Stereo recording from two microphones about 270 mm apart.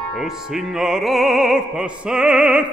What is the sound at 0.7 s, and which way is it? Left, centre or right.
Opera, centre.